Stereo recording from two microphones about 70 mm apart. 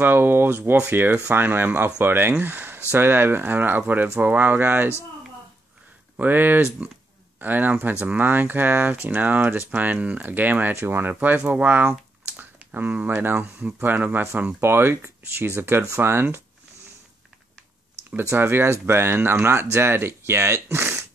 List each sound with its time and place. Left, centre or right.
0.0 s speech: right
6.1 s speech: right
18.1 s speech: right